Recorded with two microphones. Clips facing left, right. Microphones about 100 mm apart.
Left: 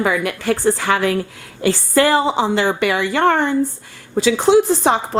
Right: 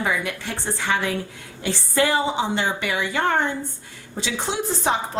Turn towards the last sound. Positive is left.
turn(degrees=80)